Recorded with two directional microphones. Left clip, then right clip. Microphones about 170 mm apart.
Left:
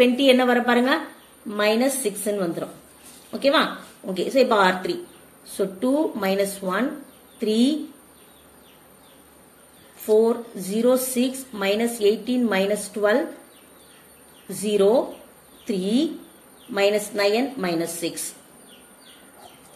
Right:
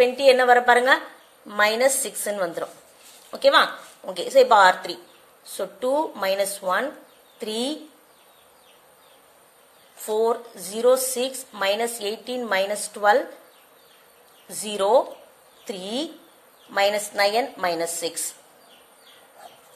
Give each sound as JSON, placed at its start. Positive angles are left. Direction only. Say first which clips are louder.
{"t": 0.0, "sound": "speech", "louder": "right 1 dB", "side_deg": -30}
{"t": 10.0, "sound": "speech", "louder": "left 4 dB", "side_deg": -35}
{"t": 14.5, "sound": "speech", "louder": "left 1 dB", "side_deg": -35}